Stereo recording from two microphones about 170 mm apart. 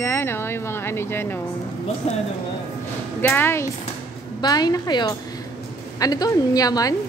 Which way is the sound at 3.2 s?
15° left (ahead or behind).